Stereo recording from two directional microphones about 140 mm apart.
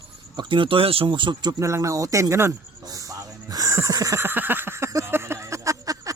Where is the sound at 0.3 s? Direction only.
35° right (ahead or behind).